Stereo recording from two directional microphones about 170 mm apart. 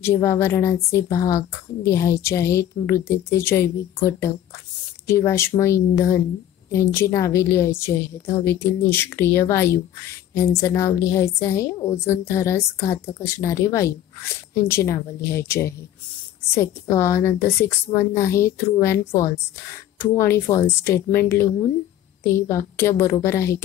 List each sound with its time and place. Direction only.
0.0 s a woman's voice: 15° left (ahead or behind)